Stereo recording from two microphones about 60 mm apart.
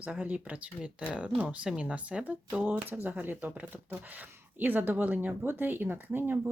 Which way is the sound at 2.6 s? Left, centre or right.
Right.